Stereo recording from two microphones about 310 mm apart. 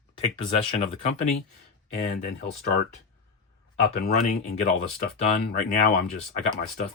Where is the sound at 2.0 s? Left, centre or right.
Left.